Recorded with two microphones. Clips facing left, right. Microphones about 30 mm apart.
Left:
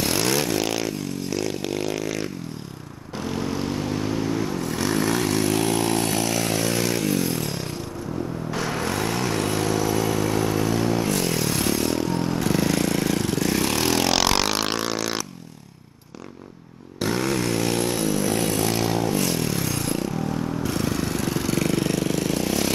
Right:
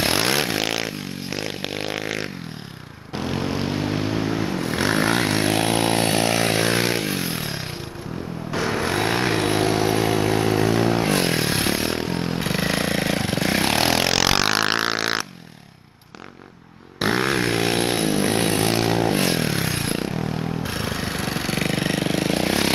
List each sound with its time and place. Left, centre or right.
0.0 s scrape: right
3.3 s vehicle: right
8.8 s vehicle: right
14.8 s vehicle: right
17.0 s a sound: right
20.6 s vehicle: right